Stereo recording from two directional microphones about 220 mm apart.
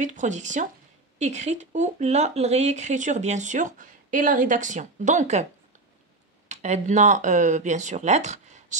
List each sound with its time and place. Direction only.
0.0 s speech: 35° right (ahead or behind)
6.5 s speech: 30° right (ahead or behind)